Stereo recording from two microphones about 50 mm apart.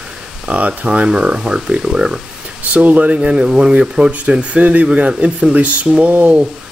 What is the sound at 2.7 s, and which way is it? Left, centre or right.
Speech, right.